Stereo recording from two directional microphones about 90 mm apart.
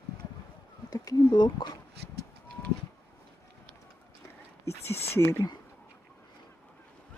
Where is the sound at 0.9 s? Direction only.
45° left (ahead or behind).